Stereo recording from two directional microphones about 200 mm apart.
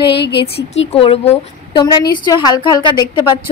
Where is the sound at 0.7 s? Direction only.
30° left (ahead or behind).